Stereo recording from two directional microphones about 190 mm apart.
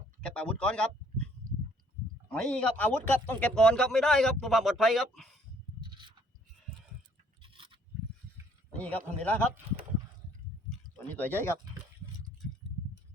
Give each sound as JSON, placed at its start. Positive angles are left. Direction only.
{"t": 0.2, "sound": "a man's voice", "side_deg": 5}
{"t": 2.3, "sound": "speech", "side_deg": 5}
{"t": 5.8, "sound": "rub", "side_deg": -25}
{"t": 7.4, "sound": "a sound", "side_deg": -25}
{"t": 8.8, "sound": "speech", "side_deg": 5}
{"t": 10.7, "sound": "a sound", "side_deg": 10}